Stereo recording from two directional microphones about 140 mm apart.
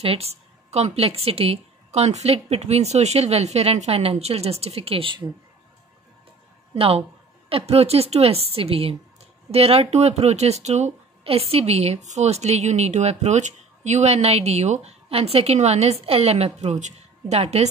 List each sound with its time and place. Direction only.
0.0 s speech: 45° right (ahead or behind)
6.7 s a woman's voice: 45° right (ahead or behind)